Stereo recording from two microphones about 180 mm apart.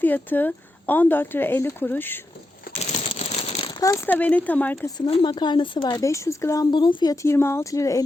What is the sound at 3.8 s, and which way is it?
Speech, 15° left (ahead or behind).